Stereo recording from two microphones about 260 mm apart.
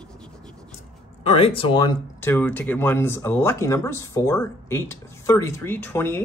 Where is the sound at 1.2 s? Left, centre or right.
Left.